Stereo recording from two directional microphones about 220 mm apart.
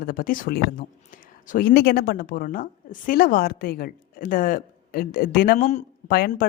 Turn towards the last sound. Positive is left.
turn(degrees=45)  # may be behind; listen again after turning